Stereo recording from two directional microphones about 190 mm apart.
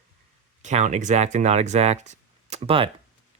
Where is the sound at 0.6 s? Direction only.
40° right (ahead or behind).